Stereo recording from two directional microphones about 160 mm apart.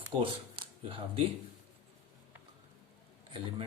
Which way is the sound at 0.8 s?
35° right (ahead or behind).